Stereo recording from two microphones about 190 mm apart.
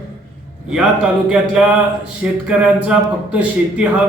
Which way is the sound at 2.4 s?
5° right (ahead or behind).